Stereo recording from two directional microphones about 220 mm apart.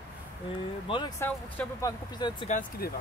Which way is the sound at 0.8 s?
20° left (ahead or behind).